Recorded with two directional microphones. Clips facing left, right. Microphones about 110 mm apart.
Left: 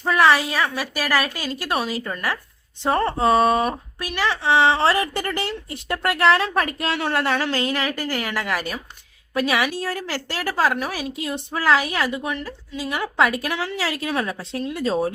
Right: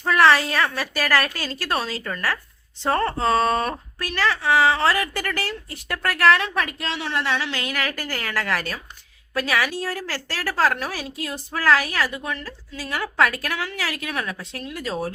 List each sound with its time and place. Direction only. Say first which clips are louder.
0.0 s a woman's voice: even; 10° left (ahead or behind); by 7.6 s 45° left (ahead or behind)
7.6 s a woman's voice: left 4 dB; 30° left (ahead or behind)
7.9 s a woman's voice: left 4 dB; 15° left (ahead or behind)